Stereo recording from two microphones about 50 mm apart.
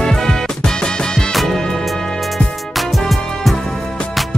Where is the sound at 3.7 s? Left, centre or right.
Centre.